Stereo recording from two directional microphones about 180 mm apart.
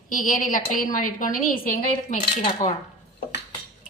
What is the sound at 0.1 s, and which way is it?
A woman's voice, 50° left (ahead or behind).